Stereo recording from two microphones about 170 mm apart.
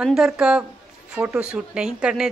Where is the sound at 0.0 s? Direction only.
5° right (ahead or behind).